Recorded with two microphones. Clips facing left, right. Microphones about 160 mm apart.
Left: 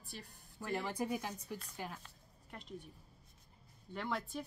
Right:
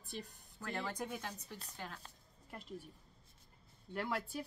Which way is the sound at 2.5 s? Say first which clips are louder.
Right 1 dB; 5° right (ahead or behind).